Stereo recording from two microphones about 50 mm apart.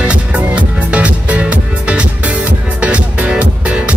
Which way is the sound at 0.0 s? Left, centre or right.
Right.